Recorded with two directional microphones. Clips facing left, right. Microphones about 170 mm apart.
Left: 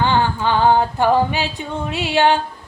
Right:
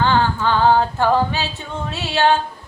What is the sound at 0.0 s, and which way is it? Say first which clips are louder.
Singing: even; 15° left (ahead or behind).